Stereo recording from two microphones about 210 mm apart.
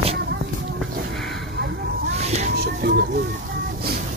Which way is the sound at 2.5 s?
50° right (ahead or behind).